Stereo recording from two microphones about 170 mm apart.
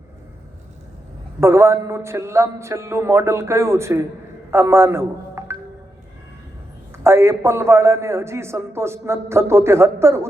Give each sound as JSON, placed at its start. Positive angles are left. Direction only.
{"t": 1.4, "sound": "a man's voice", "side_deg": -15}
{"t": 7.0, "sound": "a man's voice", "side_deg": -15}